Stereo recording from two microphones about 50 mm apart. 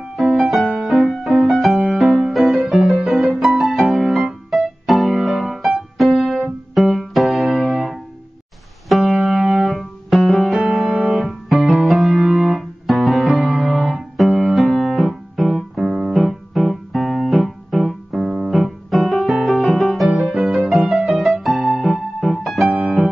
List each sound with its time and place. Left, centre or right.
0.2 s music: centre
1.7 s music: centre
22.7 s music: centre